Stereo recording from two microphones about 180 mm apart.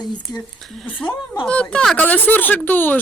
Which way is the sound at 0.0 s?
25° left (ahead or behind).